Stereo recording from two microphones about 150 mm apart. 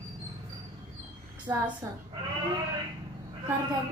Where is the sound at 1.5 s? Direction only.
25° right (ahead or behind).